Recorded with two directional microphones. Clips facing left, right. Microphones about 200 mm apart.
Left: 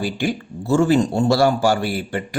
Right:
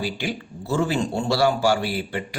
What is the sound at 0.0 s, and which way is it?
Speech, 45° left (ahead or behind).